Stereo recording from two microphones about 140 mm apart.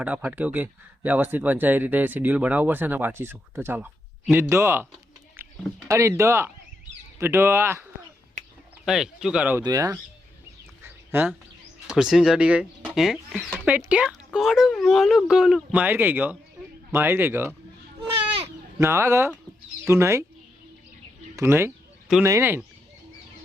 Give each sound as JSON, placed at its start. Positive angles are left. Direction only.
{"t": 0.0, "sound": "speech", "side_deg": -10}
{"t": 5.9, "sound": "speech", "side_deg": -20}
{"t": 8.8, "sound": "speech", "side_deg": 0}
{"t": 9.6, "sound": "speech", "side_deg": -25}
{"t": 10.8, "sound": "a sound", "side_deg": -15}
{"t": 11.9, "sound": "speech", "side_deg": -5}
{"t": 18.4, "sound": "fowl", "side_deg": -20}
{"t": 19.8, "sound": "speech", "side_deg": -20}
{"t": 21.3, "sound": "speech", "side_deg": -15}